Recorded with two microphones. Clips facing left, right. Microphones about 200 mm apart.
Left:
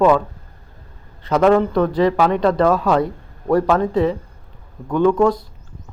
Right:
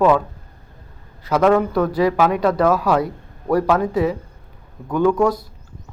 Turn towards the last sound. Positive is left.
turn(degrees=-10)  # may be behind; listen again after turning